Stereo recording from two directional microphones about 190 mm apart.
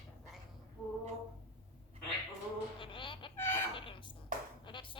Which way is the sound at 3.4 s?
10° left (ahead or behind).